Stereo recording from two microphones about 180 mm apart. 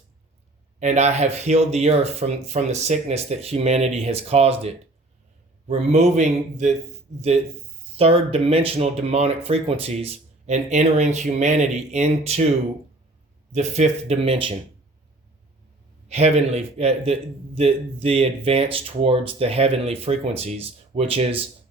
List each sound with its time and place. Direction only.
0.8 s a man's voice: 40° right (ahead or behind)
7.9 s a man's voice: 35° right (ahead or behind)
13.5 s a man's voice: 40° right (ahead or behind)
16.0 s a man's voice: 35° right (ahead or behind)